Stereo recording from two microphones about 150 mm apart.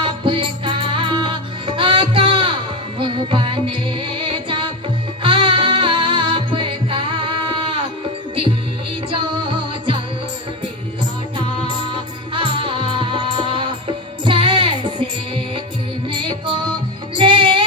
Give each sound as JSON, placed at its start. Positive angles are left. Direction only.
{"t": 0.0, "sound": "music", "side_deg": -35}
{"t": 9.0, "sound": "music", "side_deg": -35}
{"t": 12.3, "sound": "music", "side_deg": -35}
{"t": 16.1, "sound": "music", "side_deg": -35}